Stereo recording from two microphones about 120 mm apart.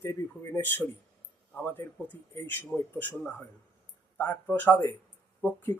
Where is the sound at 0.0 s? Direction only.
20° left (ahead or behind).